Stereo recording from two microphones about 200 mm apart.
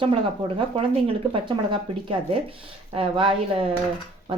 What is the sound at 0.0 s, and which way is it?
Speech, 30° right (ahead or behind).